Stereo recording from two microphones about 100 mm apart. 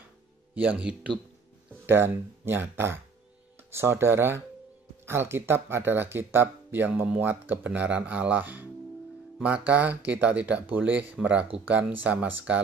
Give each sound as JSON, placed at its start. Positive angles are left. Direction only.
{"t": 0.6, "sound": "speech", "side_deg": -10}
{"t": 1.7, "sound": "speech", "side_deg": -20}